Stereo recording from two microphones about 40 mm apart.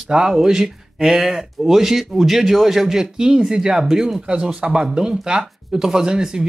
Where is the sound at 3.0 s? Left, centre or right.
Centre.